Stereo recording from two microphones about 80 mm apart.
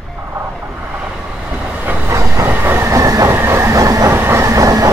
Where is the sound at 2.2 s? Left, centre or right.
Right.